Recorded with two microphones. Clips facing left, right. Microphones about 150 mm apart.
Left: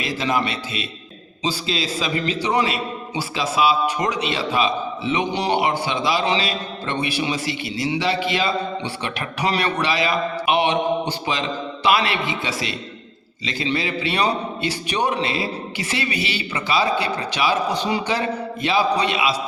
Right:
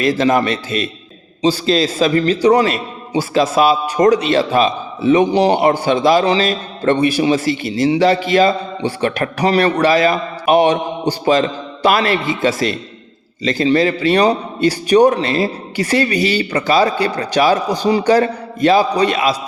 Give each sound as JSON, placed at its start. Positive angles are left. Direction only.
{"t": 0.0, "sound": "a man's voice", "side_deg": -45}